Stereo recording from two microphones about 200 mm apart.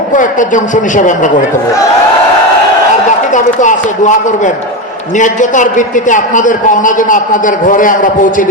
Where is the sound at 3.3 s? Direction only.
40° left (ahead or behind).